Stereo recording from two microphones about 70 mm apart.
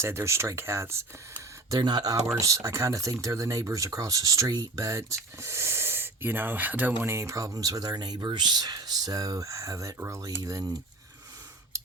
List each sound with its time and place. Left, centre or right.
0.0 s speech: right
1.7 s speech: right
2.2 s speech: right
6.9 s speech: right